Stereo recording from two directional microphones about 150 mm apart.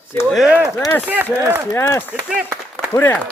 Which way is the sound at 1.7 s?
15° left (ahead or behind).